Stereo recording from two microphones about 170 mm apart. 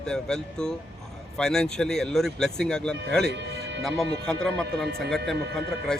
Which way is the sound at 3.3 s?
90° right.